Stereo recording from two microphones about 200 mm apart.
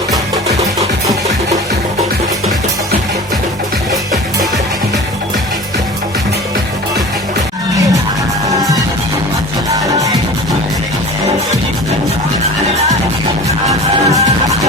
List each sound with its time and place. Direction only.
9.6 s music: 15° right (ahead or behind)
13.7 s music: 15° right (ahead or behind)